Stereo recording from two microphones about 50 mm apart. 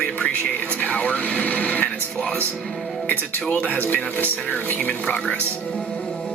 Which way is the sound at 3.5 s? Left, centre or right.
Left.